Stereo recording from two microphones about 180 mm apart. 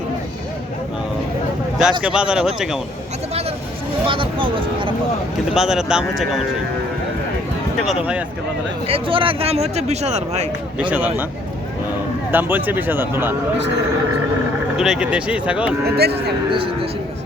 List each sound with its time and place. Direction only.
1.8 s speech: 5° right (ahead or behind)
4.0 s speech: 30° right (ahead or behind)
5.5 s speech: 5° right (ahead or behind)
7.9 s speech: 5° right (ahead or behind)
8.9 s speech: 30° right (ahead or behind)
10.8 s speech: 10° right (ahead or behind)
12.3 s speech: 10° right (ahead or behind)
14.8 s speech: 5° right (ahead or behind)
16.0 s speech: 65° right (ahead or behind)
16.5 s speech: 30° right (ahead or behind)